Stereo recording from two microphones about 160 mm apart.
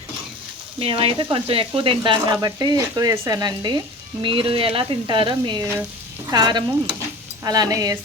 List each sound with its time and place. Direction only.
0.8 s speech: 35° right (ahead or behind)